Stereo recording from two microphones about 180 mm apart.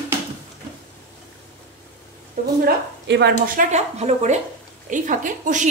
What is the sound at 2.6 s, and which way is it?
Speech, 70° right (ahead or behind).